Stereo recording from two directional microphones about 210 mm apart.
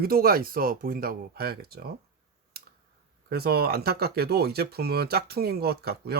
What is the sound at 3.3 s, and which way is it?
Speech, 50° right (ahead or behind).